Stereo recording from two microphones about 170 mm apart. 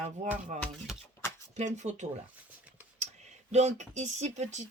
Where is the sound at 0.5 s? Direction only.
40° right (ahead or behind).